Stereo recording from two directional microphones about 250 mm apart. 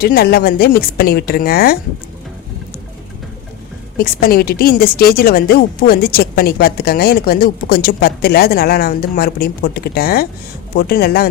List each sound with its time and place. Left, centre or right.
0.0 s a woman's voice: left
3.9 s a woman's voice: left